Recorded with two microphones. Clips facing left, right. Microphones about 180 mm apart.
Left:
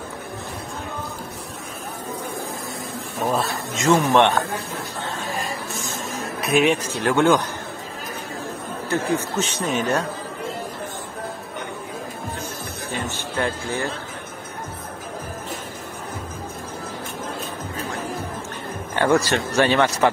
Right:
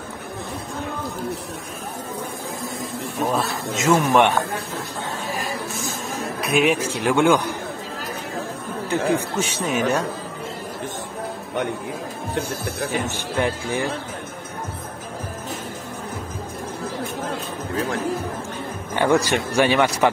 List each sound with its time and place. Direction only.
3.3 s a man's voice: centre (ahead or behind)
6.4 s a man's voice: centre (ahead or behind)
8.9 s a man's voice: 15° right (ahead or behind)
13.4 s a man's voice: 15° right (ahead or behind)
18.9 s a man's voice: 15° right (ahead or behind)